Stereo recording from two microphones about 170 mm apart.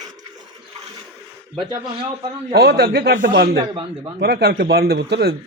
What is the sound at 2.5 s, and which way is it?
Speech, 70° right (ahead or behind).